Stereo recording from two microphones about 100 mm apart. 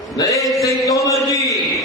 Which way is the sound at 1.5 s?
Centre (ahead or behind).